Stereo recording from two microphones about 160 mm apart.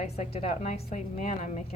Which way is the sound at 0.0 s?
45° left (ahead or behind).